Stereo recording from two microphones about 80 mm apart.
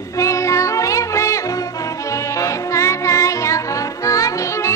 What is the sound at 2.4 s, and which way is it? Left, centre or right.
Music, left.